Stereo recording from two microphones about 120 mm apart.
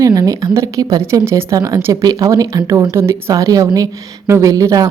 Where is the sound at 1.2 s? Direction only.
25° right (ahead or behind).